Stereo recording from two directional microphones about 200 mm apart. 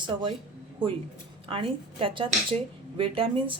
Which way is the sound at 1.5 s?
25° right (ahead or behind).